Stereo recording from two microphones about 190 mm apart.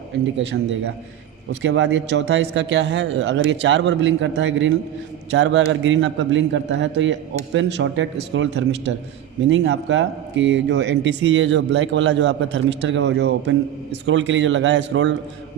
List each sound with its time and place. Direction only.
0.5 s a man's voice: 90° right
1.6 s speech: 75° right (ahead or behind)
14.0 s speech: 80° right